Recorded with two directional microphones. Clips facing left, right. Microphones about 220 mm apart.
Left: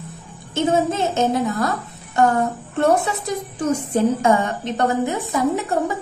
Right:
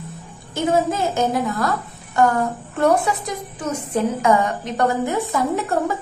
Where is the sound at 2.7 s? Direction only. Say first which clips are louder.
Even; 25° left (ahead or behind).